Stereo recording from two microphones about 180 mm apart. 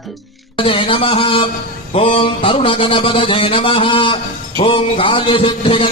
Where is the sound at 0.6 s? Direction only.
30° left (ahead or behind).